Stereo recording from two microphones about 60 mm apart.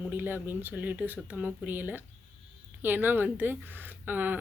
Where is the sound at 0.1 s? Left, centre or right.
Right.